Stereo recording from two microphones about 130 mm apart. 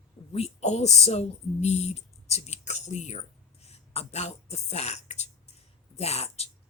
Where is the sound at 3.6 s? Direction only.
50° left (ahead or behind).